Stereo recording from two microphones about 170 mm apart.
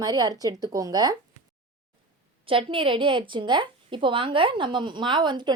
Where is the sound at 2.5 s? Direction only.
30° right (ahead or behind).